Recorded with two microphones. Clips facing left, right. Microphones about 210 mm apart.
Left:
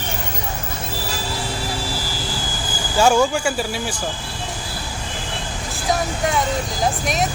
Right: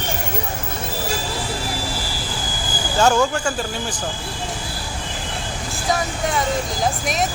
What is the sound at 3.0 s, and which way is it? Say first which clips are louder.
Speech: left 1 dB; 10° left (ahead or behind).